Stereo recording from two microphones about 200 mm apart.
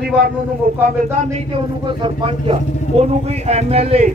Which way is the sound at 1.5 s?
25° right (ahead or behind).